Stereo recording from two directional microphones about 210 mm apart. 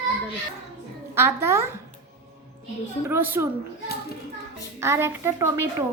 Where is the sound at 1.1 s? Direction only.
10° right (ahead or behind).